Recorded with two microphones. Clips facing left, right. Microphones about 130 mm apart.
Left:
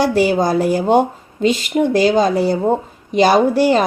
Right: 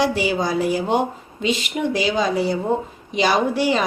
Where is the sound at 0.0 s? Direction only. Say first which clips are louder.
Left 6 dB; 45° left (ahead or behind).